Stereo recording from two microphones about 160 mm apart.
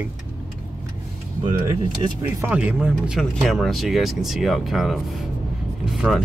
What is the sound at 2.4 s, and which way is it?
Speech, 10° right (ahead or behind).